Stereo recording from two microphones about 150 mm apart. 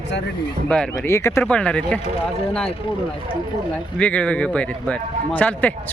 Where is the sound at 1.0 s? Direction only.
20° left (ahead or behind).